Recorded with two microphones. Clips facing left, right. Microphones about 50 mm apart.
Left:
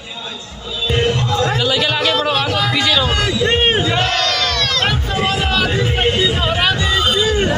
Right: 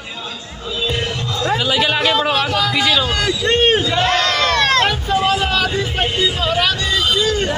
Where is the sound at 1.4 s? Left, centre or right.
Centre.